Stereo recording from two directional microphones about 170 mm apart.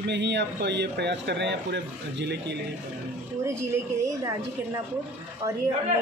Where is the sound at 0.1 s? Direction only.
90° right.